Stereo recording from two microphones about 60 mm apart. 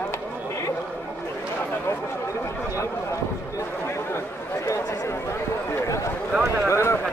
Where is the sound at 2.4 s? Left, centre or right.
Left.